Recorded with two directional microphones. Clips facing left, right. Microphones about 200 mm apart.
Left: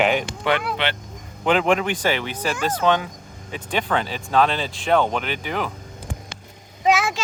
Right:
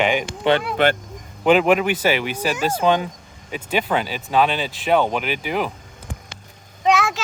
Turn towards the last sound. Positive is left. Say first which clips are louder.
# right 1 dB
turn(degrees=0)  # may be behind; listen again after turning